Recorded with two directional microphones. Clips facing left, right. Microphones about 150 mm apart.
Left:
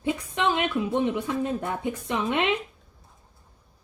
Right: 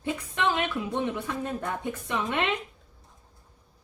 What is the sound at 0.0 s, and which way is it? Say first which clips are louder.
Speech: left 2 dB; 20° left (ahead or behind).